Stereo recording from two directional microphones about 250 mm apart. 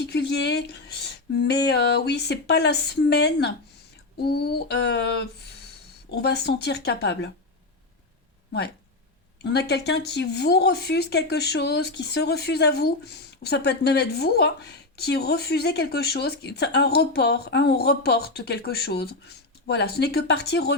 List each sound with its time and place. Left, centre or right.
0.0 s speech: left
9.4 s speech: left